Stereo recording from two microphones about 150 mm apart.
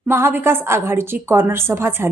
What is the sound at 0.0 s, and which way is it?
A woman's voice, 15° right (ahead or behind).